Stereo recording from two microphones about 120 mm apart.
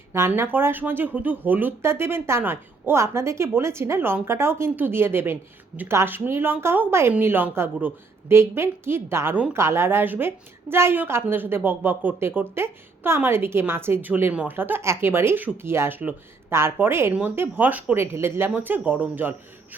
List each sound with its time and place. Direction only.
0.1 s speech: 20° right (ahead or behind)